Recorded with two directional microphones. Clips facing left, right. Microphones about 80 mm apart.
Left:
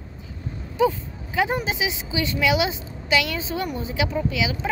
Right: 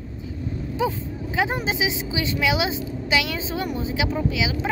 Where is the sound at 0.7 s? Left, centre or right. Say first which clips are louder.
Left 5 dB; centre.